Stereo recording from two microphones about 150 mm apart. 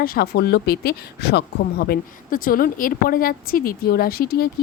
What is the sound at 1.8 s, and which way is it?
Speech, 80° left.